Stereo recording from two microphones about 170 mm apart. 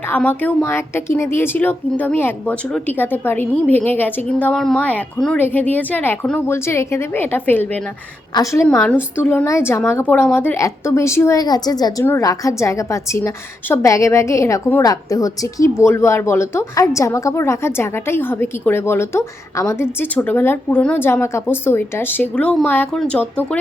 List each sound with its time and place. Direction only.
0.2 s a woman's voice: 10° left (ahead or behind)
8.3 s a woman's voice: 20° left (ahead or behind)